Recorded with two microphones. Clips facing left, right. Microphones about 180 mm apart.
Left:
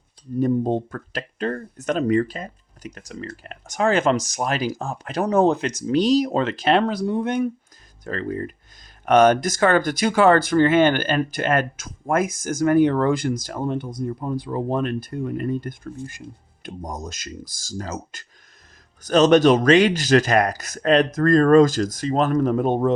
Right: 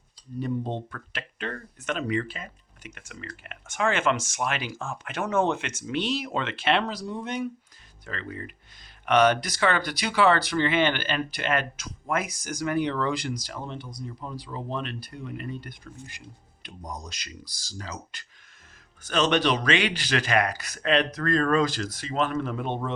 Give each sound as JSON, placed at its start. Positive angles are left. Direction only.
{"t": 0.3, "sound": "speech", "side_deg": 45}
{"t": 6.8, "sound": "speech", "side_deg": 55}
{"t": 8.0, "sound": "speech", "side_deg": 40}